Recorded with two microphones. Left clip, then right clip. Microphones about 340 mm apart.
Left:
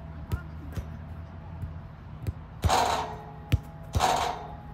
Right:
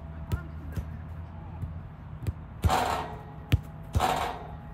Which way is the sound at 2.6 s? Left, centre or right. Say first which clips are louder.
Left 2 dB; left.